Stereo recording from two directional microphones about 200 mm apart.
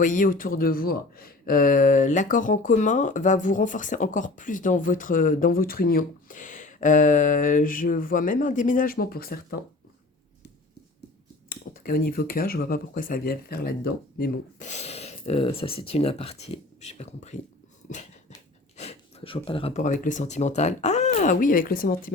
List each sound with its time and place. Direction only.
0.0 s speech: 40° left (ahead or behind)
11.4 s speech: 45° left (ahead or behind)
14.7 s speech: 35° left (ahead or behind)
18.8 s speech: 30° left (ahead or behind)